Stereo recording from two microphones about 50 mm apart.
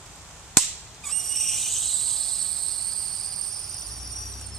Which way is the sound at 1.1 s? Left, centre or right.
Centre.